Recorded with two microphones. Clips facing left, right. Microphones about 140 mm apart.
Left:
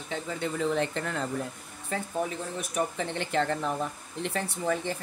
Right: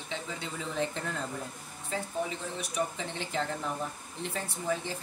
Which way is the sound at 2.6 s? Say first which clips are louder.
Left 4 dB; 60° left (ahead or behind).